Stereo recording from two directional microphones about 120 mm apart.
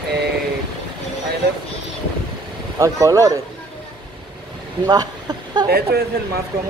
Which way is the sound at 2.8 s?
30° right (ahead or behind).